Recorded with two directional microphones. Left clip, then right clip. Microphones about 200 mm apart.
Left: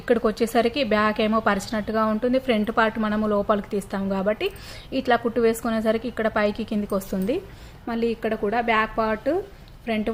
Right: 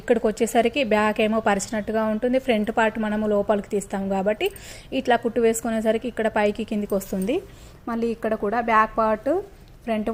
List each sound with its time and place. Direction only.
0.3 s a woman's voice: 15° right (ahead or behind)